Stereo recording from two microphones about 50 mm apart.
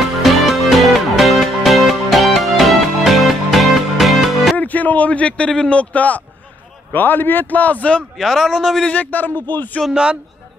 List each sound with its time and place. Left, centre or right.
0.2 s music: centre
4.6 s a sound: left
5.7 s a man's voice: left
8.2 s a man's voice: centre
8.8 s a man's voice: left